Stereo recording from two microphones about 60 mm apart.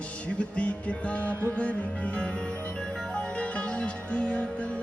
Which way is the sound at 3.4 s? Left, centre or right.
Centre.